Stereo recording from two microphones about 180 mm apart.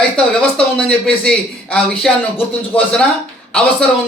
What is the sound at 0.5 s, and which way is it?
A man's voice, 5° left (ahead or behind).